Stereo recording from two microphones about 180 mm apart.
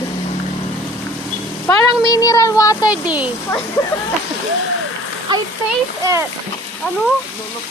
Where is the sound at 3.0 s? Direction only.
10° right (ahead or behind).